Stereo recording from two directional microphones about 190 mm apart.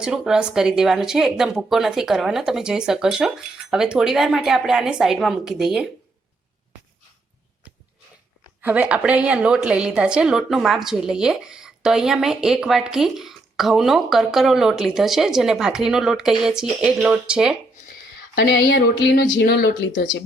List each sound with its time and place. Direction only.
0.0 s a woman's voice: 5° right (ahead or behind)
8.6 s a woman's voice: 10° right (ahead or behind)
18.3 s speech: 60° left (ahead or behind)